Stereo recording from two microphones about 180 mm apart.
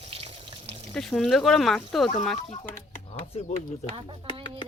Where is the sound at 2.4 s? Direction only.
40° left (ahead or behind).